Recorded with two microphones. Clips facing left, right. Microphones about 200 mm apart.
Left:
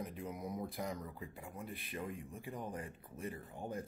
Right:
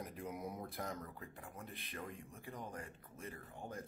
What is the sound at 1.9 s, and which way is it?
Speech, 15° left (ahead or behind).